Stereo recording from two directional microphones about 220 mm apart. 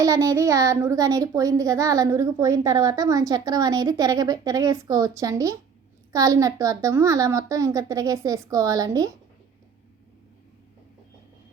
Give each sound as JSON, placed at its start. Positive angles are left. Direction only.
{"t": 0.0, "sound": "a child's voice", "side_deg": -15}